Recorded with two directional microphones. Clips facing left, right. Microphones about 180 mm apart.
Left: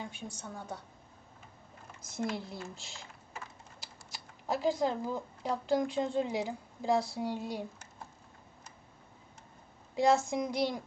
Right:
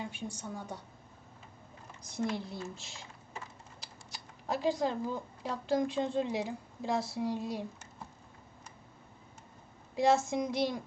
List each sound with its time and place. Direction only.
0.3 s a woman's voice: 10° right (ahead or behind)
2.0 s speech: centre (ahead or behind)
9.9 s speech: centre (ahead or behind)